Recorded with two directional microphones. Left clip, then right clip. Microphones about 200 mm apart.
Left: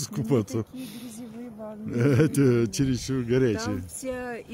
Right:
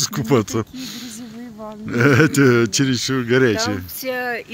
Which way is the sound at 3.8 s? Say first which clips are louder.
Right 10 dB; 45° left (ahead or behind).